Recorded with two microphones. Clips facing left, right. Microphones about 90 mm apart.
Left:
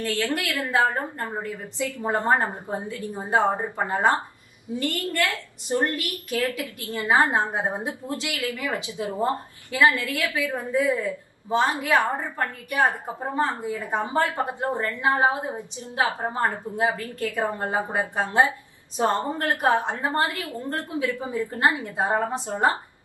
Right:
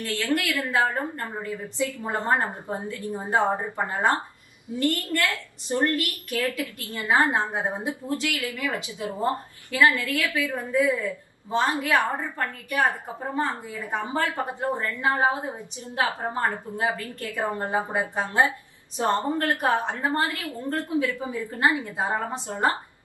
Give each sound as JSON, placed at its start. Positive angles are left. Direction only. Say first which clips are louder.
{"t": 0.0, "sound": "a woman's voice", "louder": "even", "side_deg": 20}
{"t": 4.8, "sound": "a woman's voice", "louder": "right 1 dB", "side_deg": 20}